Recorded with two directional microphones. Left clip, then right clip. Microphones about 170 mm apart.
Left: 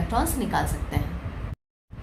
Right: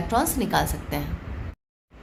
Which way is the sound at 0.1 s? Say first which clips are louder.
Right 3 dB; 40° right (ahead or behind).